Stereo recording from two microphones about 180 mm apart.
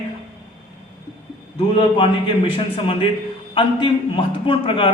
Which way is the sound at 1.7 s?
30° left (ahead or behind).